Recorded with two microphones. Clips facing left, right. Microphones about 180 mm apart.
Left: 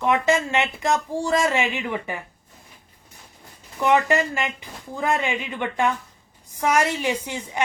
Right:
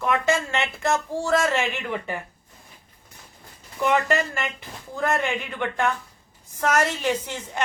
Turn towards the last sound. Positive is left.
turn(degrees=10)  # may be behind; listen again after turning